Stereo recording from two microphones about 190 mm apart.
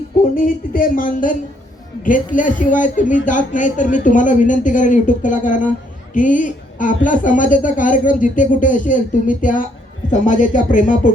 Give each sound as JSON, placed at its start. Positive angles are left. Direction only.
{"t": 0.3, "sound": "a woman's voice", "side_deg": 45}